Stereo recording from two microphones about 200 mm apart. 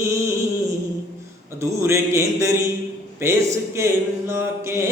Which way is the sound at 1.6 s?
15° right (ahead or behind).